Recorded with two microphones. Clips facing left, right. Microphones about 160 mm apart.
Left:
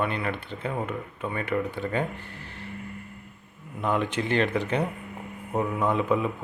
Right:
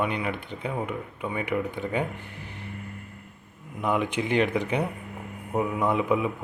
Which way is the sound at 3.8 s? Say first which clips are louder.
Even; 15° right (ahead or behind).